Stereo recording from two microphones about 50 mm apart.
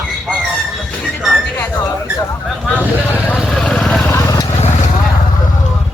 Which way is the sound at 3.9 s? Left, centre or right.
Centre.